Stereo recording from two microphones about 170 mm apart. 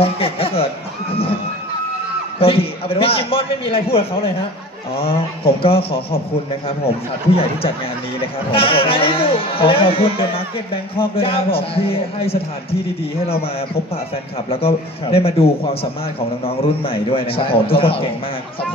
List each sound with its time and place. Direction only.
0.0 s a sound: 35° left (ahead or behind)
1.1 s music: 35° left (ahead or behind)
2.4 s a man's voice: 35° left (ahead or behind)
8.2 s a man's voice: 35° left (ahead or behind)
14.5 s a man's voice: 35° left (ahead or behind)